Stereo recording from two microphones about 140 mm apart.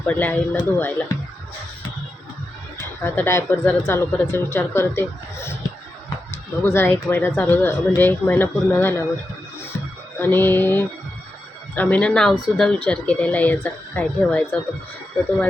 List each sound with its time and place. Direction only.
0.0 s speech: 10° left (ahead or behind)
2.8 s speech: 15° left (ahead or behind)
10.2 s speech: 15° left (ahead or behind)